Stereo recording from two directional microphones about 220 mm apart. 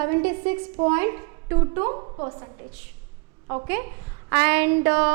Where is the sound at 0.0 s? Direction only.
10° right (ahead or behind).